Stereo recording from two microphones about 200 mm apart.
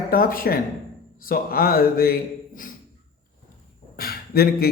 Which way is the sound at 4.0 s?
50° left (ahead or behind).